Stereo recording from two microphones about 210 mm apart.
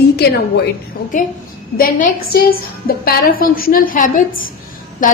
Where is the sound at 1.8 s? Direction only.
40° left (ahead or behind).